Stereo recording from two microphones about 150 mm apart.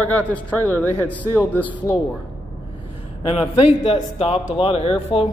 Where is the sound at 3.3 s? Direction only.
35° left (ahead or behind).